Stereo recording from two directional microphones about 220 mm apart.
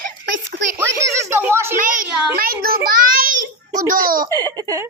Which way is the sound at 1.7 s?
40° right (ahead or behind).